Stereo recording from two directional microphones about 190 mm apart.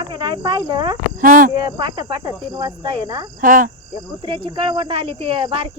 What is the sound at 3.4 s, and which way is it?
Speech, 45° right (ahead or behind).